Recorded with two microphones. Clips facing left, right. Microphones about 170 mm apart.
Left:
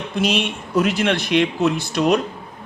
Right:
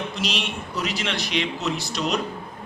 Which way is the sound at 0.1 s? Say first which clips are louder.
Left 8 dB; 50° left (ahead or behind).